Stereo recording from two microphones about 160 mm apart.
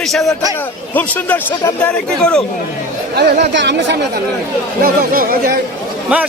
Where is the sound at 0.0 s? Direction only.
Centre (ahead or behind).